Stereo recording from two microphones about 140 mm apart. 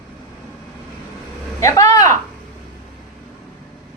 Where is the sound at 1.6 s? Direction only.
20° left (ahead or behind).